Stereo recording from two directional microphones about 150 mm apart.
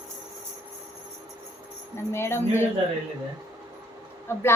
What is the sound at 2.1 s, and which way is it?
Speech, 15° left (ahead or behind).